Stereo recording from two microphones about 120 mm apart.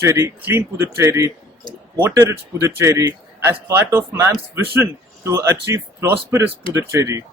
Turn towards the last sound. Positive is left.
turn(degrees=-25)  # may be behind; listen again after turning